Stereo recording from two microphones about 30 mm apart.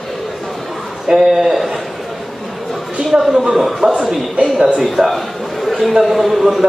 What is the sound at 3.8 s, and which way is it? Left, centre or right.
Speech, right.